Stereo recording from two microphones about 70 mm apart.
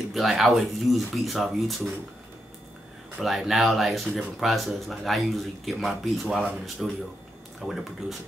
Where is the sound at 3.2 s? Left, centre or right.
Centre.